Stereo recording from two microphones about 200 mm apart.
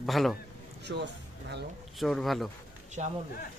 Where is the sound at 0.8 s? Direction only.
60° right (ahead or behind).